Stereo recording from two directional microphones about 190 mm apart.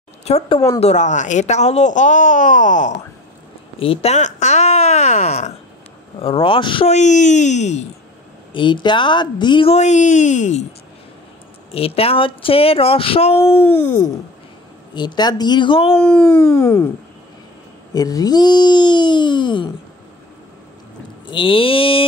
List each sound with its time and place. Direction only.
0.2 s a woman's voice: 35° left (ahead or behind)
3.8 s a woman's voice: 30° left (ahead or behind)
8.5 s speech: 25° left (ahead or behind)
11.7 s speech: 30° left (ahead or behind)
13.4 s a sound: 10° left (ahead or behind)
15.0 s speech: 20° left (ahead or behind)
16.0 s a sound: 10° left (ahead or behind)
17.9 s speech: 20° left (ahead or behind)
21.3 s speech: 25° left (ahead or behind)